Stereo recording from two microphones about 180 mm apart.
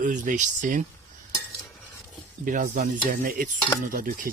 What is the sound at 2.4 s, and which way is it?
Speech, 50° right (ahead or behind).